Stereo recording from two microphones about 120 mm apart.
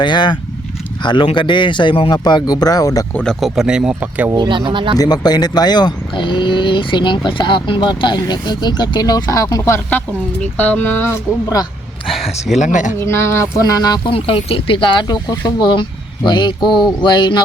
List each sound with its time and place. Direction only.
0.0 s speech: 40° left (ahead or behind)
3.1 s speech: 10° left (ahead or behind)
3.4 s speech: 5° right (ahead or behind)
4.3 s speech: 40° right (ahead or behind)
4.9 s speech: 35° left (ahead or behind)
10.4 s speech: 15° left (ahead or behind)
12.5 s speech: 90° left
13.0 s speech: 20° left (ahead or behind)
14.1 s speech: 50° left (ahead or behind)